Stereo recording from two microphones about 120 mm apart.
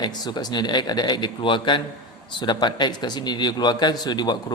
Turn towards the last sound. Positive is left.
turn(degrees=35)  # may be behind; listen again after turning